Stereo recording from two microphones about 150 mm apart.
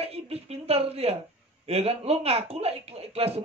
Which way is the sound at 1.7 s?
45° right (ahead or behind).